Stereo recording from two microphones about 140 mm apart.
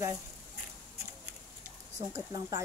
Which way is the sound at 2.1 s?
25° right (ahead or behind).